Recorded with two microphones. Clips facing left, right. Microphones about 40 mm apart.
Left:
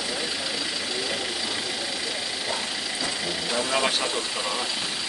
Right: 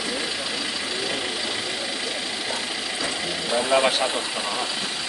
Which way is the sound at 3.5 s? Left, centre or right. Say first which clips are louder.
Right 5 dB; centre.